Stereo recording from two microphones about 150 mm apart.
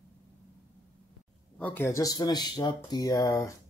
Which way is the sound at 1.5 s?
10° left (ahead or behind).